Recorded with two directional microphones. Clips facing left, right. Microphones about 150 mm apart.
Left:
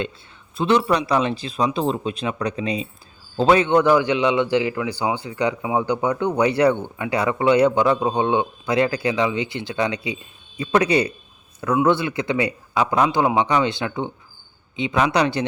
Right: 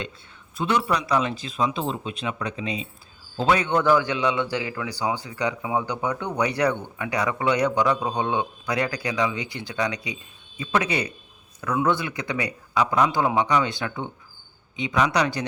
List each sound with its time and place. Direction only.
0.5 s speech: 25° left (ahead or behind)